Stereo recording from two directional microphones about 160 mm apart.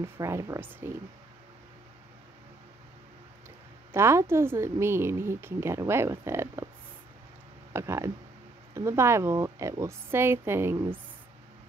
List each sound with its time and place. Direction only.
0.0 s a woman's voice: 15° right (ahead or behind)
3.9 s a woman's voice: 15° right (ahead or behind)
7.7 s a woman's voice: 15° right (ahead or behind)